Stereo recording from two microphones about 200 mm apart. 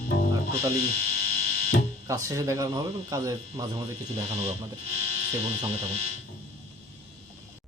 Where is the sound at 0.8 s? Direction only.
50° left (ahead or behind).